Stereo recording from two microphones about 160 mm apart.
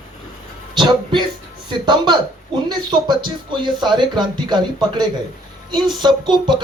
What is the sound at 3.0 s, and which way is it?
Speech, 30° right (ahead or behind).